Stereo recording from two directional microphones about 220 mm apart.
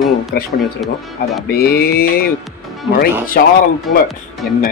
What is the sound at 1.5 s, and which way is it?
Speech, 45° left (ahead or behind).